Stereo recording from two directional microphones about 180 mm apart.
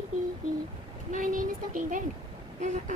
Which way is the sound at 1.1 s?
45° right (ahead or behind).